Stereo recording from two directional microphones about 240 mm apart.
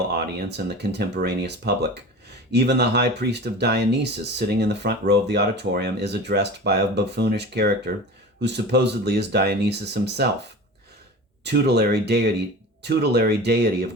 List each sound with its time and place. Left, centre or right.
0.1 s speech: right
11.4 s speech: right